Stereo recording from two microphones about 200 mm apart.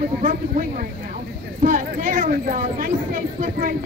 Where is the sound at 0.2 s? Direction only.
45° right (ahead or behind).